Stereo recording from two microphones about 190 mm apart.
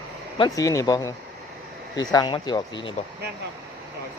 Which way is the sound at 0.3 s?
20° left (ahead or behind).